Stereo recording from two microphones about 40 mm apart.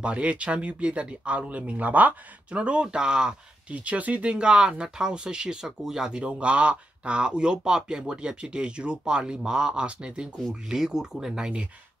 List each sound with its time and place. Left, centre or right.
0.0 s speech: right
2.5 s speech: right
3.7 s speech: right; by 11.5 s centre